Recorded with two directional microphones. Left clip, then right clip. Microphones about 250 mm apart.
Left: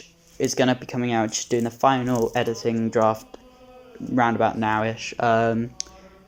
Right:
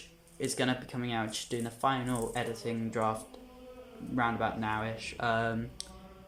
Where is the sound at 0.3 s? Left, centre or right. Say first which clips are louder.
Left 11 dB; left.